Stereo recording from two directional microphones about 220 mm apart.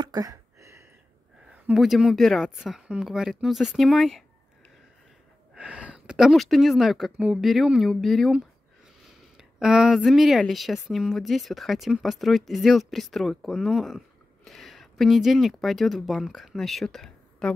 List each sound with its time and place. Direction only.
0.0 s a sound: 15° right (ahead or behind)
1.5 s speech: centre (ahead or behind)
5.5 s speech: 5° right (ahead or behind)